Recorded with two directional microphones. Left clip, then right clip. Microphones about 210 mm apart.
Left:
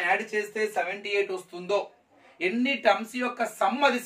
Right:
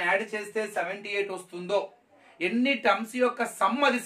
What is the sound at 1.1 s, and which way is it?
Speech, 15° right (ahead or behind).